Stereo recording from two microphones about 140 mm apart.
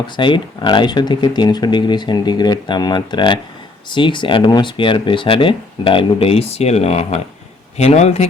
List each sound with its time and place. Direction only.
0.0 s a man's voice: 35° left (ahead or behind); by 8.3 s 50° left (ahead or behind)